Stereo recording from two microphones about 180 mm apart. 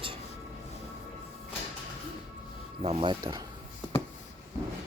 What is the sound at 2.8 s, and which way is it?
Speech, 30° right (ahead or behind).